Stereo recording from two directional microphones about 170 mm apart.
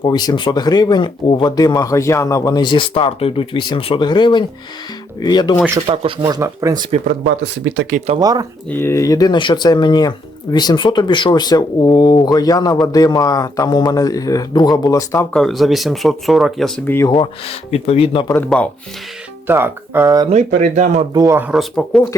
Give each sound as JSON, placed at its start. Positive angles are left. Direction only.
{"t": 0.0, "sound": "speech", "side_deg": 25}
{"t": 5.9, "sound": "speech", "side_deg": -35}
{"t": 6.2, "sound": "speech", "side_deg": -20}
{"t": 7.1, "sound": "speech", "side_deg": -90}
{"t": 7.9, "sound": "speech", "side_deg": -40}
{"t": 8.2, "sound": "speech", "side_deg": -20}
{"t": 8.7, "sound": "speech", "side_deg": 15}
{"t": 15.3, "sound": "speech", "side_deg": 0}
{"t": 17.1, "sound": "speech", "side_deg": 30}
{"t": 19.5, "sound": "speech", "side_deg": -10}
{"t": 20.3, "sound": "speech", "side_deg": -45}
{"t": 21.1, "sound": "speech", "side_deg": -20}
{"t": 21.5, "sound": "speech", "side_deg": 0}